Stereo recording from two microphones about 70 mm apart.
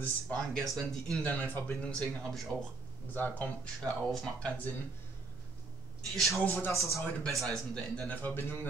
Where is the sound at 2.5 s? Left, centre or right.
Right.